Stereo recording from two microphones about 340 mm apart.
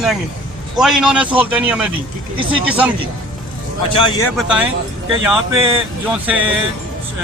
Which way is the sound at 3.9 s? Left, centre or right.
Centre.